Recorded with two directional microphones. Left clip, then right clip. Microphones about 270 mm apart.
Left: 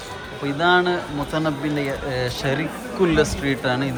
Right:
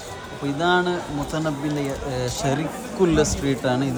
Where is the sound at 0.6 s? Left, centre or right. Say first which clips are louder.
Left 3 dB; centre.